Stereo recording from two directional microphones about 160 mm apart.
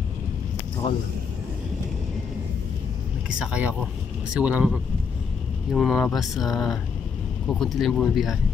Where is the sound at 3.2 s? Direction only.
5° right (ahead or behind).